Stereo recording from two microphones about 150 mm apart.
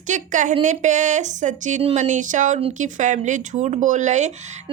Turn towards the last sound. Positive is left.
turn(degrees=-50)  # may be behind; listen again after turning